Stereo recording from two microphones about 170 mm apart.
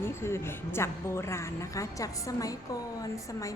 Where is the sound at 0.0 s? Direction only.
15° left (ahead or behind).